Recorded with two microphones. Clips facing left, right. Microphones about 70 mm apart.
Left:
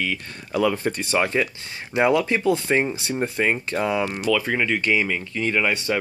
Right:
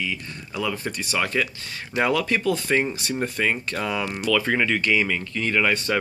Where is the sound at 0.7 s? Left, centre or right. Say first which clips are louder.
Left 4 dB; left.